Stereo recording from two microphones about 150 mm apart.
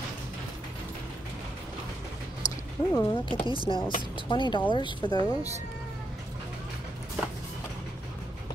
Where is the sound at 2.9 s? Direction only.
20° left (ahead or behind).